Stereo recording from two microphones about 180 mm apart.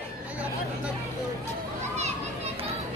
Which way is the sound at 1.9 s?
35° right (ahead or behind).